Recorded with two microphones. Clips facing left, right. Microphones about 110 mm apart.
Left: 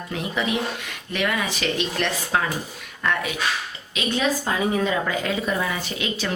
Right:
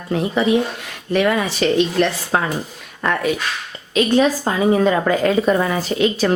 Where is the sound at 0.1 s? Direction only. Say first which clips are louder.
Right 9 dB; 35° right (ahead or behind).